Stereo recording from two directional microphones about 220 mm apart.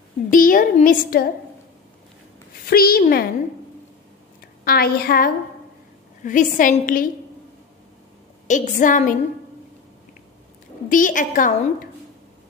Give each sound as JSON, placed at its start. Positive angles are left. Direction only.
{"t": 0.3, "sound": "a woman's voice", "side_deg": 40}
{"t": 2.6, "sound": "a woman's voice", "side_deg": 45}
{"t": 4.6, "sound": "a woman's voice", "side_deg": 45}
{"t": 8.5, "sound": "a woman's voice", "side_deg": 35}
{"t": 10.9, "sound": "a woman's voice", "side_deg": 35}